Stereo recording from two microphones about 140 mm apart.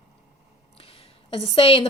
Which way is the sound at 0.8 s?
40° left (ahead or behind).